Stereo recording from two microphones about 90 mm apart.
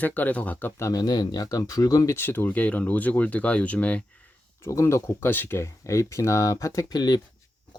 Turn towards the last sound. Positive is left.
turn(degrees=45)  # may be behind; listen again after turning